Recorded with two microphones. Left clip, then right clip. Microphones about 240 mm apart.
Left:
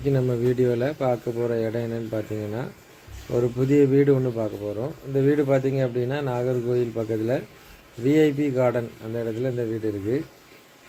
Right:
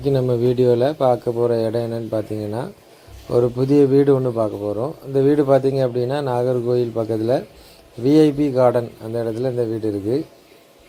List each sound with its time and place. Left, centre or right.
0.0 s speech: right